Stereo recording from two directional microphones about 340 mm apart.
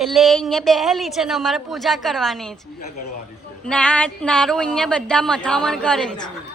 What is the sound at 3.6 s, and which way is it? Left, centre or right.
A woman's voice, centre.